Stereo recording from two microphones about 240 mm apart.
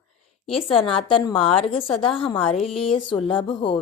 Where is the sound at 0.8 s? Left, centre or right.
Left.